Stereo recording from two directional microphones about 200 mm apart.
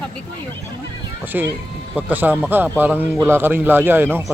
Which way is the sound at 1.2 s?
10° right (ahead or behind).